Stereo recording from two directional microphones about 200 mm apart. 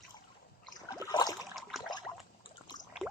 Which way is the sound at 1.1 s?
20° left (ahead or behind).